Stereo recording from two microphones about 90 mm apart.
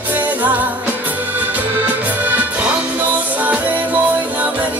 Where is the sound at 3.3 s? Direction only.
20° right (ahead or behind).